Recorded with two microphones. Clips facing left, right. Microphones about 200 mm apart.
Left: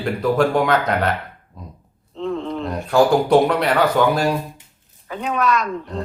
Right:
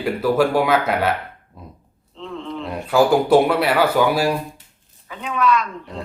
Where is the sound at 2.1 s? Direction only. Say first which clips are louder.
Left 6 dB; 45° left (ahead or behind).